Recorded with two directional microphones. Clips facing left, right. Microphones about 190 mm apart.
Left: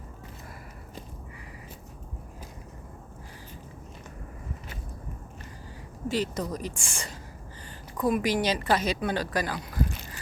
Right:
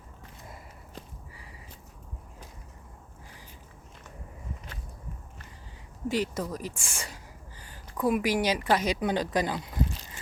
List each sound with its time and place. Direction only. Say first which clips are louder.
6.1 s a woman's voice: even; 10° right (ahead or behind)